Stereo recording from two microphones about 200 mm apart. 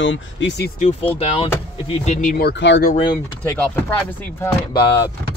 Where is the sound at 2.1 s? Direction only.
45° left (ahead or behind).